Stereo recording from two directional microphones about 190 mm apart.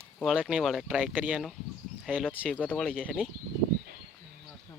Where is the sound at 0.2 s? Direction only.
Centre (ahead or behind).